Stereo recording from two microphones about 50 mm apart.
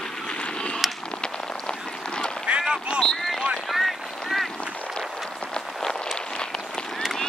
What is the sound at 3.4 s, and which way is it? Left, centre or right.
Boat, centre.